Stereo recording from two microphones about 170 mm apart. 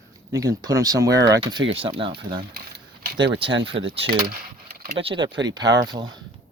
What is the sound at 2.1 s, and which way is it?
Speech, 65° right (ahead or behind).